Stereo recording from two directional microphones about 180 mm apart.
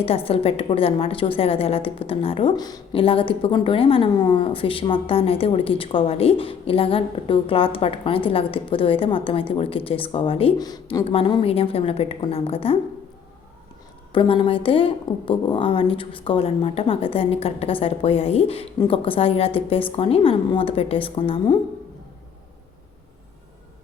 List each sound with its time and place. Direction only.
0.0 s a woman's voice: 35° left (ahead or behind)
14.1 s a woman's voice: 30° left (ahead or behind)